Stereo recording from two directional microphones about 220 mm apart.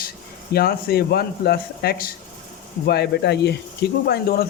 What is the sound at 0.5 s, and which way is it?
Speech, 45° left (ahead or behind).